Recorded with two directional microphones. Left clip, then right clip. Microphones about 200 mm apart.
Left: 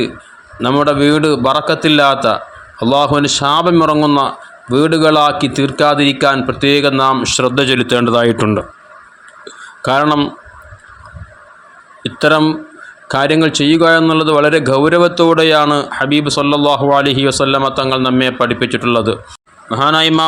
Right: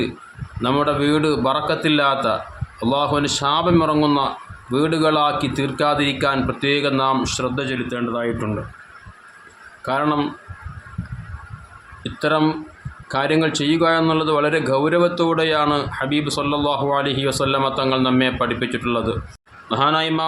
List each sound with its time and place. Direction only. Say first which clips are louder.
0.6 s a man's voice: left 7 dB; 30° left (ahead or behind); by 8.4 s 50° left (ahead or behind)
9.8 s a man's voice: left 8 dB; 35° left (ahead or behind)
12.0 s a man's voice: left 8 dB; 35° left (ahead or behind)
19.6 s a man's voice: left 5 dB; 20° left (ahead or behind)
19.9 s a man's voice: left 8 dB; 35° left (ahead or behind)